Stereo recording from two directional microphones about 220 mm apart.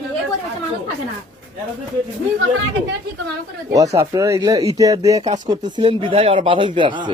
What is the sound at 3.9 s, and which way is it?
Speech, 15° right (ahead or behind).